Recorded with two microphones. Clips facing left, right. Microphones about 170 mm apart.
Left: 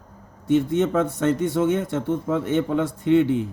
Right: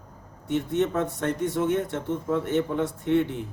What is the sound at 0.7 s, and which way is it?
A man's voice, 85° left.